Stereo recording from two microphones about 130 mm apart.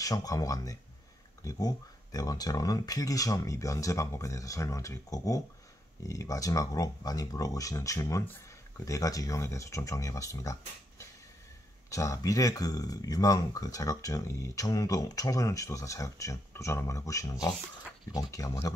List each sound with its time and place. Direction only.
0.0 s speech: 30° left (ahead or behind)